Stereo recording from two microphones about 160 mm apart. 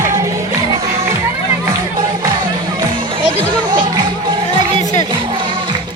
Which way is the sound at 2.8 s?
30° right (ahead or behind).